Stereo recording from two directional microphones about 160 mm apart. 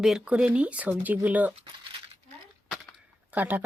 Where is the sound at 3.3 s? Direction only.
10° right (ahead or behind).